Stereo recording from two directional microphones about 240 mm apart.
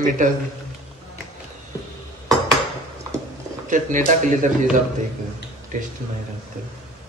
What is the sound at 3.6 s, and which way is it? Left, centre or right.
Speech, right.